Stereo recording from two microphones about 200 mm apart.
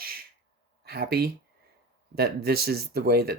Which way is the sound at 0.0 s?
50° right (ahead or behind).